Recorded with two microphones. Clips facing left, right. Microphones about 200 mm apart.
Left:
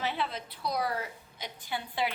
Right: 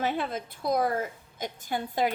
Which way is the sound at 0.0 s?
50° right (ahead or behind).